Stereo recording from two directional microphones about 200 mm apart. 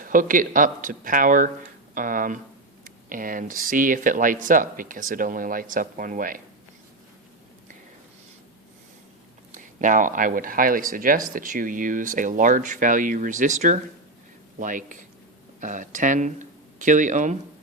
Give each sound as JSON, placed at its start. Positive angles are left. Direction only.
{"t": 0.0, "sound": "speech", "side_deg": -40}
{"t": 9.5, "sound": "speech", "side_deg": -40}